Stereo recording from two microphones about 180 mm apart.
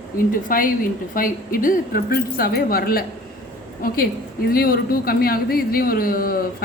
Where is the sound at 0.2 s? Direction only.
50° left (ahead or behind).